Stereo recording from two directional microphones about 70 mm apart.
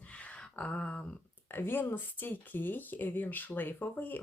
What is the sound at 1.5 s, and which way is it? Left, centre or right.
Speech, left.